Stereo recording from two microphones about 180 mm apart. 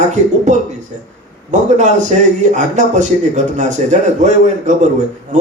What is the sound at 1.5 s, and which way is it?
A man's voice, 40° right (ahead or behind).